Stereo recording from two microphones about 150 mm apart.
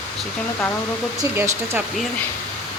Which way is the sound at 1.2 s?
20° right (ahead or behind).